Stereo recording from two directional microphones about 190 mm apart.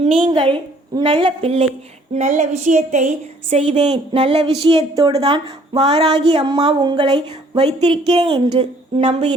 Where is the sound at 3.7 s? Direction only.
30° right (ahead or behind).